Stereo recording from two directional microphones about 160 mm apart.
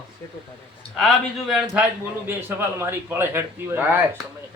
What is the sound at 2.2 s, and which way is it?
A man's voice, 15° right (ahead or behind).